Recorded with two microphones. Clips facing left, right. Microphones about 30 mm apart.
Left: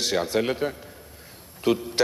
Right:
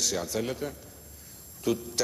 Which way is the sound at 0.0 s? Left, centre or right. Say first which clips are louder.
Left 6 dB; left.